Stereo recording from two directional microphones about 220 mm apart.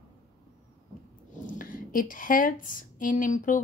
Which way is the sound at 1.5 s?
40° left (ahead or behind).